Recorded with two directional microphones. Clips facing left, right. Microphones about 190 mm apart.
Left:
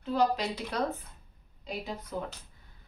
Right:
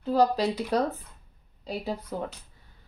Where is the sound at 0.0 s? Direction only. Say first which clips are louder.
Right 5 dB; 35° right (ahead or behind).